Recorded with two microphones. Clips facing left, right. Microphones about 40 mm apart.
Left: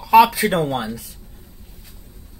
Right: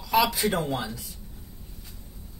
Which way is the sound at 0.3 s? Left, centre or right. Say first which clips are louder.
Left 7 dB; left.